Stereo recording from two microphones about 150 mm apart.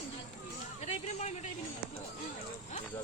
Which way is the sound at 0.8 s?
45° left (ahead or behind).